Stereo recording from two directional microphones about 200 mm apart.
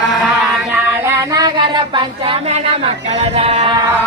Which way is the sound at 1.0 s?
20° right (ahead or behind).